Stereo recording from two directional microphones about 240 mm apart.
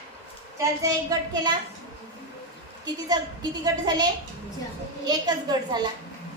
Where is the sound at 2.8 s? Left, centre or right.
Centre.